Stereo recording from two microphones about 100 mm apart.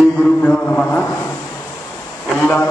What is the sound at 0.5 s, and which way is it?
Speech, 15° left (ahead or behind).